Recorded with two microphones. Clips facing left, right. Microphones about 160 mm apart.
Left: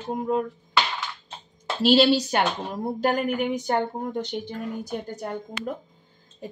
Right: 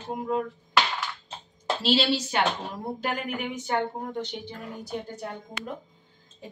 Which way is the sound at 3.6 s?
40° left (ahead or behind).